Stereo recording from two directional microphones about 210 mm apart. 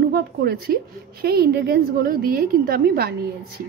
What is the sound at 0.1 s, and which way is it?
A woman's voice, 45° right (ahead or behind).